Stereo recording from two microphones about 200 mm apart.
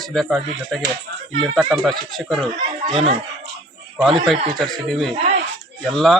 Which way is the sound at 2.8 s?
30° right (ahead or behind).